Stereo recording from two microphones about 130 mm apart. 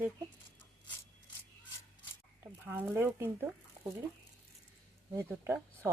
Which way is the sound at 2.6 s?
15° right (ahead or behind).